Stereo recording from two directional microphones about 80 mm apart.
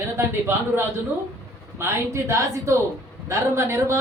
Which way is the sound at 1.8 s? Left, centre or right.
Right.